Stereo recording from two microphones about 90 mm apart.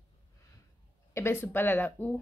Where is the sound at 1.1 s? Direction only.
25° left (ahead or behind).